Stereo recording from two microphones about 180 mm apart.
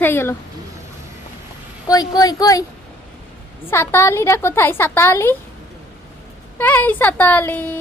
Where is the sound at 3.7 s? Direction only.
15° left (ahead or behind).